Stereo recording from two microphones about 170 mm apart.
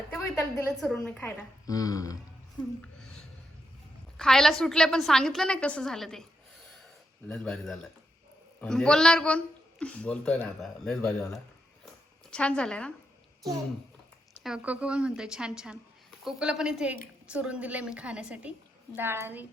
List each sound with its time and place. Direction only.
0.1 s a sound: 15° left (ahead or behind)
1.0 s a man's voice: 5° left (ahead or behind)
1.6 s speech: 20° left (ahead or behind)
2.8 s a sound: 5° left (ahead or behind)
4.2 s a man's voice: 5° left (ahead or behind)
7.3 s a man's voice: 5° left (ahead or behind)
14.4 s a man's voice: 5° right (ahead or behind)